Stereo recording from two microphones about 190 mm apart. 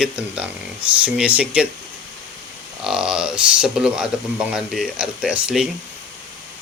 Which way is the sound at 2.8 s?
5° right (ahead or behind).